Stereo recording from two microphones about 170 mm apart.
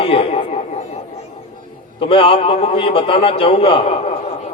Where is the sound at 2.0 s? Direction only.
30° left (ahead or behind).